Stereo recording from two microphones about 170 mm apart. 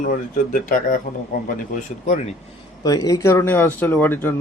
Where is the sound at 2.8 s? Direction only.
20° left (ahead or behind).